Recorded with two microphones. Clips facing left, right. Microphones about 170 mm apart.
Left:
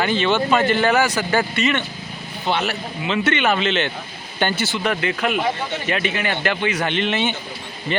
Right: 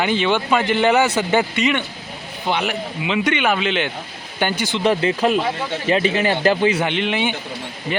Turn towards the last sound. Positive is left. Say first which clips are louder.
# right 1 dB
turn(degrees=-15)  # may be behind; listen again after turning